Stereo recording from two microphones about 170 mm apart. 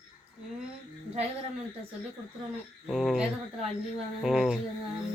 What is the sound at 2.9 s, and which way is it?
Speech, centre (ahead or behind).